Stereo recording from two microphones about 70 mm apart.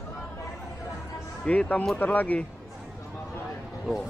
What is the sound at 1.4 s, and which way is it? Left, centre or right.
Speech, left.